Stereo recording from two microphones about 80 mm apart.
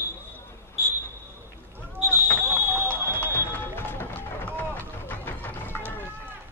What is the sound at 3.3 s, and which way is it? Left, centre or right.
Run, left.